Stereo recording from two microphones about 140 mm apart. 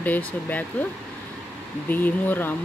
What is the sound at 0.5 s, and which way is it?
Speech, 10° left (ahead or behind).